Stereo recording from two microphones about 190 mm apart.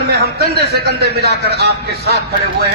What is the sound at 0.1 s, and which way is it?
A man's voice, 60° right (ahead or behind).